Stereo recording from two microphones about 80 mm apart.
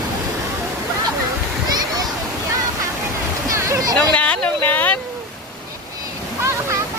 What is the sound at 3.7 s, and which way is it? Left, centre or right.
Speech, right.